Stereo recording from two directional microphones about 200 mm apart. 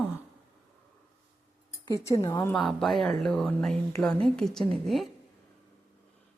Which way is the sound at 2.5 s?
Centre (ahead or behind).